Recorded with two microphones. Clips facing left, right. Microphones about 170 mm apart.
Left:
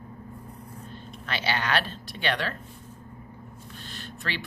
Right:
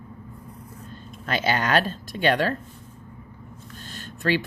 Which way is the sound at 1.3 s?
45° right (ahead or behind).